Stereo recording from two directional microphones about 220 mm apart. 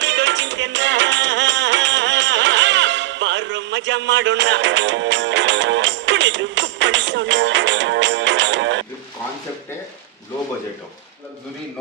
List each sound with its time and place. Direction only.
0.0 s music: 55° right (ahead or behind)